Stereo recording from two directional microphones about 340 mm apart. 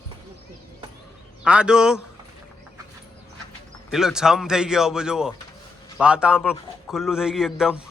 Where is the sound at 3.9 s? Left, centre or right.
Centre.